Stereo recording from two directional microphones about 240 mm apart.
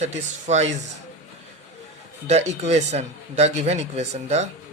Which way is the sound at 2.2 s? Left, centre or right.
Right.